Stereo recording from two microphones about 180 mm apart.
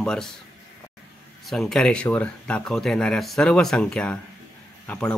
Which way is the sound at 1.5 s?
Centre (ahead or behind).